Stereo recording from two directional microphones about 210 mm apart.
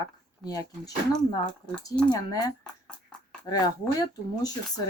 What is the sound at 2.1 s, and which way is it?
Speech, 20° left (ahead or behind).